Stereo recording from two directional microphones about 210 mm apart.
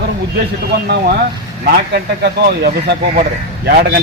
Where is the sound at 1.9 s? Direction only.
50° right (ahead or behind).